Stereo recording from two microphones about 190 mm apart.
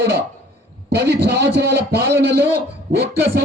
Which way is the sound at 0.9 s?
60° right (ahead or behind).